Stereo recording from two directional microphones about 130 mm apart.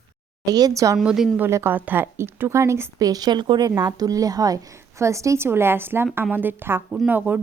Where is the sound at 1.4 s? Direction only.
20° right (ahead or behind).